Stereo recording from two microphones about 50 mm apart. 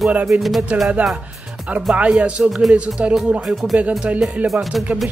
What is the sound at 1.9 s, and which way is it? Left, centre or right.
Speech, right.